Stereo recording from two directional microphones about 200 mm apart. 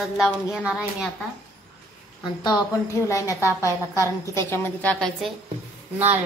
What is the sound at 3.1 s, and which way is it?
A woman's voice, 15° left (ahead or behind).